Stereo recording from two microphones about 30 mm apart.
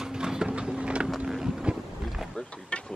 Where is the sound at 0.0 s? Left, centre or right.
Right.